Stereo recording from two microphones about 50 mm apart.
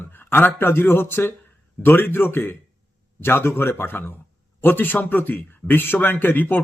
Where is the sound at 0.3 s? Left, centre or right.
Left.